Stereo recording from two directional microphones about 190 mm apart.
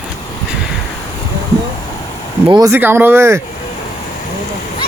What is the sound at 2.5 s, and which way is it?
Speech, 20° right (ahead or behind).